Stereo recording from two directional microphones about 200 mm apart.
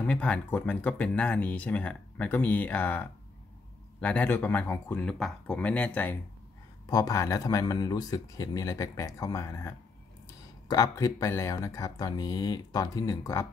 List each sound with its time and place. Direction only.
0.0 s speech: 5° left (ahead or behind)